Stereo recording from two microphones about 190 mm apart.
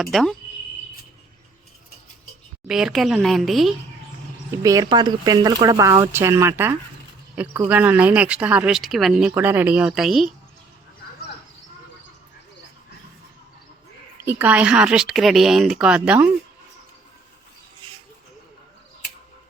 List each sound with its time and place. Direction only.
0.0 s speech: centre (ahead or behind)
2.6 s speech: centre (ahead or behind)
4.5 s speech: 15° right (ahead or behind); by 10.3 s centre (ahead or behind)
14.3 s speech: 10° right (ahead or behind)